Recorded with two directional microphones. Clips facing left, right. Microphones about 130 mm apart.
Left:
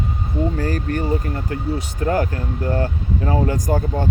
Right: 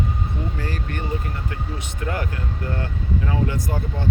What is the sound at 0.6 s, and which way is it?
Speech, 40° left (ahead or behind).